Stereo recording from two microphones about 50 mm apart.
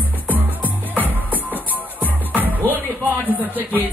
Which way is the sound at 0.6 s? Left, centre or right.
Right.